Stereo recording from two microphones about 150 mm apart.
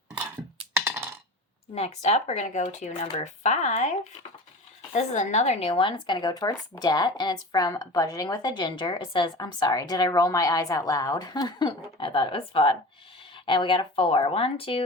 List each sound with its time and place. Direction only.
0.9 s computer keyboard: 15° right (ahead or behind)
1.7 s speech: 45° left (ahead or behind)